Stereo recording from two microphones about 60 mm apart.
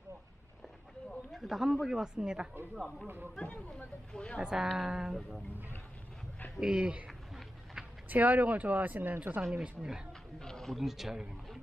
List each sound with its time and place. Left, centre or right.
1.3 s speech: centre
2.7 s speech: centre
3.3 s speech: centre
4.4 s speech: centre
6.6 s speech: centre
7.1 s a sound: centre
8.1 s speech: right
9.4 s speech: centre
10.1 s a sound: centre
10.8 s speech: centre